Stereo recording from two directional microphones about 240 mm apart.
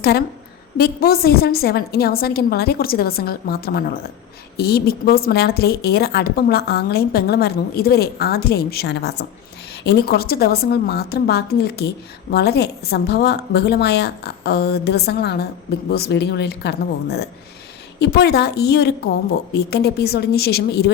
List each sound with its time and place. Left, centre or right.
0.0 s a woman's voice: left